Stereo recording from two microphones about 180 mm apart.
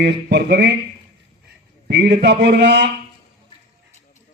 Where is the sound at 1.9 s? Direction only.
70° right (ahead or behind).